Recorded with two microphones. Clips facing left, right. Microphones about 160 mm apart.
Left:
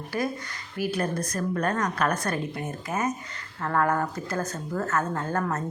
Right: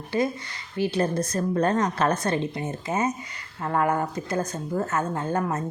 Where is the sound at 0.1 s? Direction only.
25° right (ahead or behind).